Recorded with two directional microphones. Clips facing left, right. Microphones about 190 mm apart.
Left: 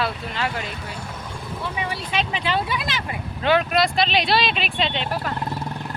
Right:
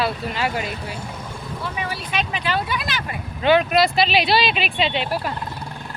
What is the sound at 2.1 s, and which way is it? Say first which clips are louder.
Speech: even; 25° left (ahead or behind).